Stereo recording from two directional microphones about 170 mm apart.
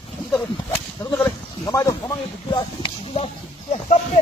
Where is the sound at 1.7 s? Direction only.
20° left (ahead or behind).